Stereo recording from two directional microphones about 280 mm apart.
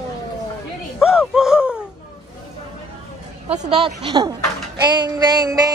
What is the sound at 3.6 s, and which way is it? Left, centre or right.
Speech, centre.